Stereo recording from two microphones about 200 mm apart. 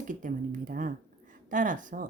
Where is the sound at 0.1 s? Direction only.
40° right (ahead or behind).